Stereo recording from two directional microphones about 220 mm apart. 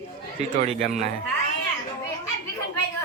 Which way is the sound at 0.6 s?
30° right (ahead or behind).